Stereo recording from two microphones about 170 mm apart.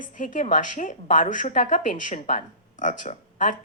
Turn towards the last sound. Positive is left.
turn(degrees=45)  # may be behind; listen again after turning